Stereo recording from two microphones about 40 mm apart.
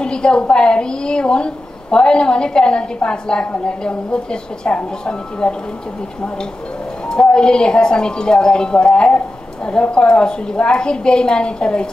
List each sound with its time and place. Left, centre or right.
0.0 s a woman's voice: left
7.1 s a woman's voice: left